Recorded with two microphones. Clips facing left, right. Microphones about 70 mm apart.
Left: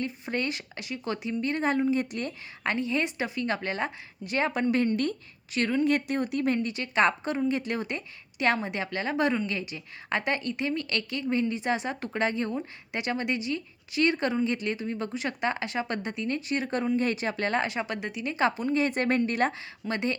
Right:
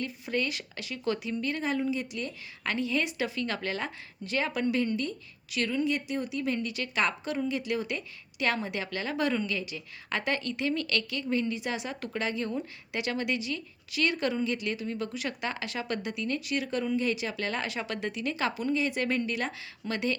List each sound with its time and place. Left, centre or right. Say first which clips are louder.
0.0 s a woman's voice: left 1 dB; left
2.6 s a woman's voice: left 2 dB; left
19.9 s a woman's voice: left 1 dB; left